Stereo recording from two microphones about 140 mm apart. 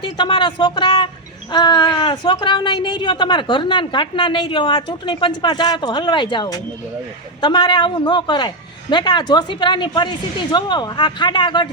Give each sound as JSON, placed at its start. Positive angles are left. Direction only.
{"t": 0.0, "sound": "speech", "side_deg": 35}